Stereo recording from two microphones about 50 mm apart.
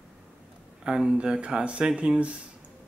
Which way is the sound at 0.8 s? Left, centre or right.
Centre.